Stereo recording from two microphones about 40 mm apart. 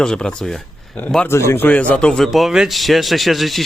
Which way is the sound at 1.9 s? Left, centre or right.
Left.